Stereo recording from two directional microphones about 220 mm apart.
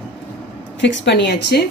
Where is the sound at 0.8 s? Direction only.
50° left (ahead or behind).